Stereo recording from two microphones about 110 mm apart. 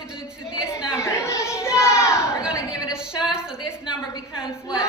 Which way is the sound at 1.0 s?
25° left (ahead or behind).